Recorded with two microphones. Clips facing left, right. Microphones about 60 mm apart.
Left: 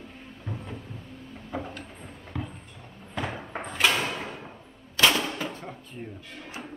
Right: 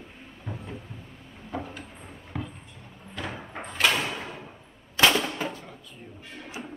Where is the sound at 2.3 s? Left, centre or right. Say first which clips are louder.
Even; centre.